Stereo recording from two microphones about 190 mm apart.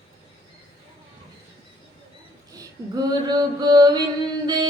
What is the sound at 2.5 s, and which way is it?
Male singing, 20° right (ahead or behind).